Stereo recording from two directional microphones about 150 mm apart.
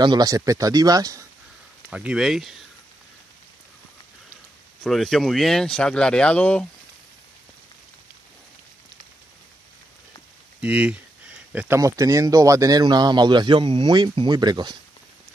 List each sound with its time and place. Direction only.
0.0 s speech: 25° right (ahead or behind)
1.9 s speech: 5° right (ahead or behind)
4.8 s speech: centre (ahead or behind)
10.6 s speech: 10° right (ahead or behind); by 14.8 s 30° right (ahead or behind)